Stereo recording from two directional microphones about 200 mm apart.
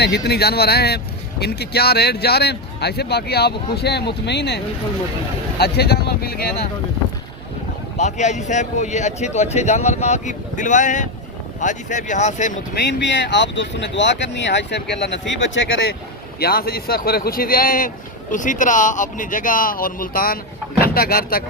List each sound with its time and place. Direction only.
0.0 s a man's voice: 55° left (ahead or behind)
7.9 s a man's voice: 35° left (ahead or behind)
12.8 s speech: 60° left (ahead or behind)
16.4 s a man's voice: 50° left (ahead or behind)